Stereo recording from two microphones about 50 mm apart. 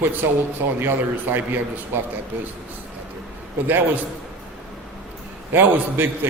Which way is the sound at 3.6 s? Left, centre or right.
Right.